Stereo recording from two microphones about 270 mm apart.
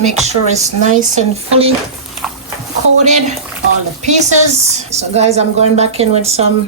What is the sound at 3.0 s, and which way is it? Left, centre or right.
A woman's voice, right.